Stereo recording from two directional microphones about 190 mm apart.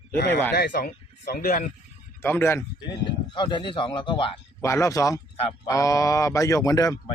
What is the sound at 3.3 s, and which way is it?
Speech, 25° left (ahead or behind).